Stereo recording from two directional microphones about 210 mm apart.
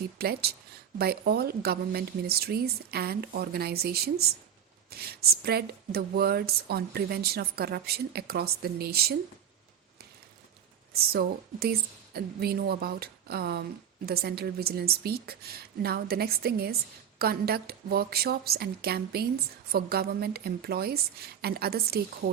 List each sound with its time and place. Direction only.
0.2 s a woman's voice: 50° right (ahead or behind)
11.1 s a woman's voice: 45° right (ahead or behind)